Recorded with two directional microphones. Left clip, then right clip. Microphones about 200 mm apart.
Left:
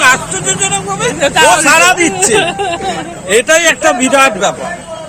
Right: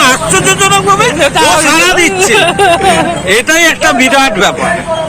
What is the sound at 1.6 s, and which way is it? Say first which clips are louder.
Speech: right 1 dB; 25° left (ahead or behind).